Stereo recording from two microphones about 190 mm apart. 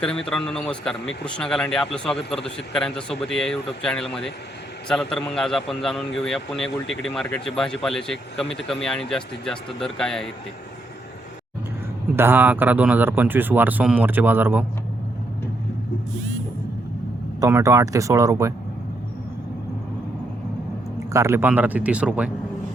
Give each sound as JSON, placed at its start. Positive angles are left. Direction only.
{"t": 0.3, "sound": "speech", "side_deg": 5}
{"t": 12.1, "sound": "speech", "side_deg": -10}
{"t": 17.4, "sound": "speech", "side_deg": -15}
{"t": 21.1, "sound": "speech", "side_deg": -15}